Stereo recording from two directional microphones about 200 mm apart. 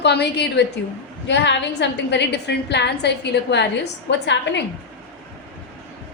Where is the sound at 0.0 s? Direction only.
55° left (ahead or behind).